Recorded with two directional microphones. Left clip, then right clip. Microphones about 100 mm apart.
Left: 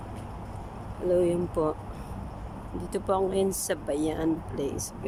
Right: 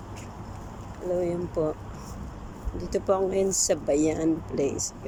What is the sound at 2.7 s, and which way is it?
Speech, 10° right (ahead or behind).